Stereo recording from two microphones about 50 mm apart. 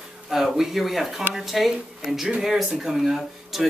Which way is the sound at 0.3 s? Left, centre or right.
Centre.